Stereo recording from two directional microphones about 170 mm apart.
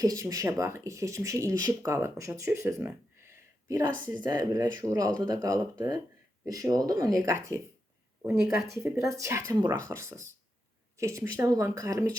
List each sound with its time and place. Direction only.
0.0 s speech: 20° right (ahead or behind)
8.7 s speech: 15° right (ahead or behind)